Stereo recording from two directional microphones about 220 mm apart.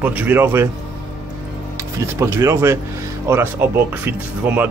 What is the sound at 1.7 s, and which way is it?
Speech, 10° right (ahead or behind).